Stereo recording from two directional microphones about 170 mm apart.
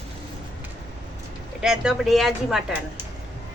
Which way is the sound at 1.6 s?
5° right (ahead or behind).